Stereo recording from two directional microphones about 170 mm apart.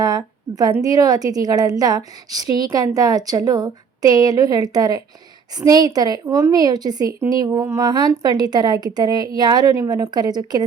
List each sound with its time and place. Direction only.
0.0 s a woman's voice: 25° right (ahead or behind)